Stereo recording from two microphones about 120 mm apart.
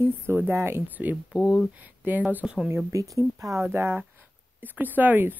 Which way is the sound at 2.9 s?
25° right (ahead or behind).